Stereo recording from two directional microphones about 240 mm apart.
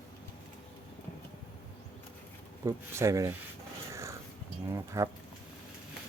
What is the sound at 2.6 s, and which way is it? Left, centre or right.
Speech, centre.